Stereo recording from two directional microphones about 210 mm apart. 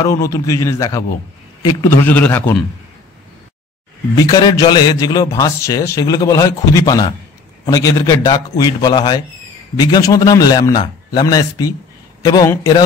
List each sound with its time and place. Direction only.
0.0 s a man's voice: 15° left (ahead or behind)
4.2 s a man's voice: 15° left (ahead or behind)